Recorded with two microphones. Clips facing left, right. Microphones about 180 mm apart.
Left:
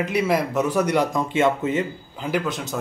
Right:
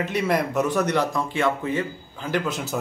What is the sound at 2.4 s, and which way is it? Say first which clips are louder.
Speech: even; 5° right (ahead or behind).